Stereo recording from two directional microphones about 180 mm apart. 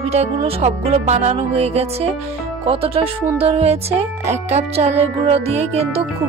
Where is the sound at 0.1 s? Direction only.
35° right (ahead or behind).